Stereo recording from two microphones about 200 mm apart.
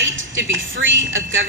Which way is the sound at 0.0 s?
70° right (ahead or behind).